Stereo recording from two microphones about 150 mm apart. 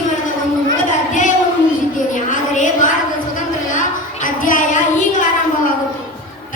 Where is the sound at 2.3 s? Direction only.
60° left (ahead or behind).